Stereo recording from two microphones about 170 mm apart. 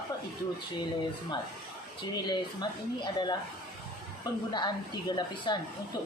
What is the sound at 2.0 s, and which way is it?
A man's voice, 25° left (ahead or behind).